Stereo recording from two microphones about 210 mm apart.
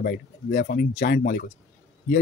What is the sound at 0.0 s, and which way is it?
Speech, 45° left (ahead or behind).